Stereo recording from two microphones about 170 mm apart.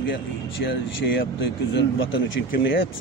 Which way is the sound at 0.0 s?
90° left.